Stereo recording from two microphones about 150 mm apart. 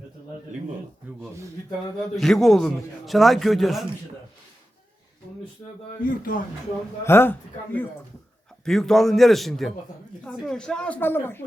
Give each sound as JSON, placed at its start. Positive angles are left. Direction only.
{"t": 2.1, "sound": "a man's voice", "side_deg": 0}
{"t": 6.0, "sound": "speech", "side_deg": 70}
{"t": 7.0, "sound": "speech", "side_deg": 15}
{"t": 8.6, "sound": "a man's voice", "side_deg": 5}